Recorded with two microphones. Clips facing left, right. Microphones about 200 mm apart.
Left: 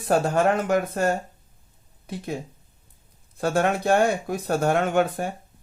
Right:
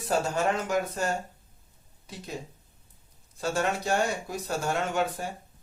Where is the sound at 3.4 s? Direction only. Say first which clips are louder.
Left 6 dB; 55° left (ahead or behind).